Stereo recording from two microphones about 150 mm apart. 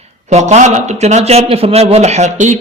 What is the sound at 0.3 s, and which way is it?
A man's voice, 50° right (ahead or behind).